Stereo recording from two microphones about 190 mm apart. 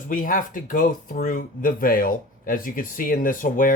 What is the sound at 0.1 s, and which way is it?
Speech, 45° left (ahead or behind).